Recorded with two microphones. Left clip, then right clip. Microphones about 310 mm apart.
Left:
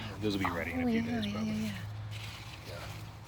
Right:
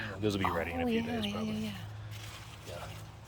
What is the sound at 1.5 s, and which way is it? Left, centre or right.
Squish, centre.